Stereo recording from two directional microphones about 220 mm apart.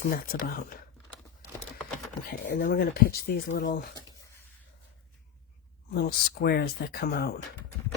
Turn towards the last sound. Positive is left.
turn(degrees=45)  # may be behind; listen again after turning